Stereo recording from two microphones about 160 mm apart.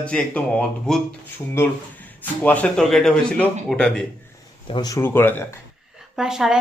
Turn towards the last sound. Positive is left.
turn(degrees=-5)  # may be behind; listen again after turning